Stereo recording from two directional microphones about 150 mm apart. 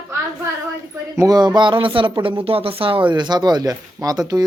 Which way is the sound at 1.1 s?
20° right (ahead or behind).